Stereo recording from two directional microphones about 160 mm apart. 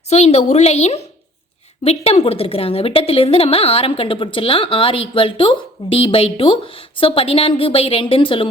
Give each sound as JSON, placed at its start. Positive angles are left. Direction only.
{"t": 0.1, "sound": "a woman's voice", "side_deg": 40}